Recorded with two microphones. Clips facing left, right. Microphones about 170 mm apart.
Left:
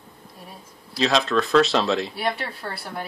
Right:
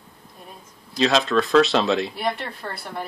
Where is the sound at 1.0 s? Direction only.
Centre (ahead or behind).